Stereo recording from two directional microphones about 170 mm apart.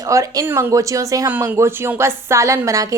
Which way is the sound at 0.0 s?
20° right (ahead or behind).